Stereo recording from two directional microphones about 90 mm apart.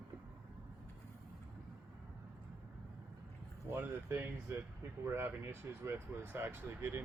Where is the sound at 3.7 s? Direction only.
20° right (ahead or behind).